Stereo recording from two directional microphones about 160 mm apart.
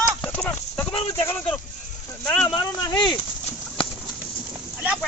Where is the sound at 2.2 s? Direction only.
5° left (ahead or behind).